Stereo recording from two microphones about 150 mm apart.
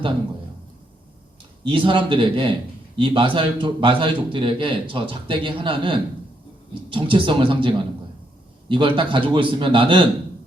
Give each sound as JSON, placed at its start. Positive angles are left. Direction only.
{"t": 1.6, "sound": "a man's voice", "side_deg": -35}
{"t": 8.7, "sound": "a man's voice", "side_deg": -35}